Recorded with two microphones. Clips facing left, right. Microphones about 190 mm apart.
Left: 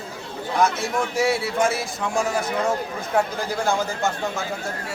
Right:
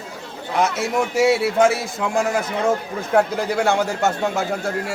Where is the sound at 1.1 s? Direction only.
70° right (ahead or behind).